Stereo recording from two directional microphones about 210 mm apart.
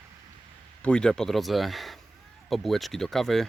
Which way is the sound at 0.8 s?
5° left (ahead or behind).